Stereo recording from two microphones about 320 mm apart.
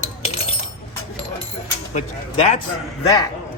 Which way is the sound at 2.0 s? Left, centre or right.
Left.